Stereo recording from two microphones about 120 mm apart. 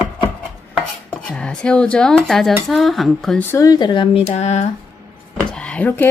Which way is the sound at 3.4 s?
20° left (ahead or behind).